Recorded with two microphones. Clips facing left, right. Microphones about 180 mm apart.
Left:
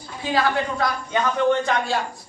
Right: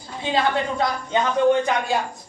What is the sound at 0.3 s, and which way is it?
Speech, 25° right (ahead or behind).